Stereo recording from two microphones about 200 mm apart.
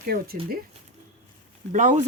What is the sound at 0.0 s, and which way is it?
Speech, 50° right (ahead or behind).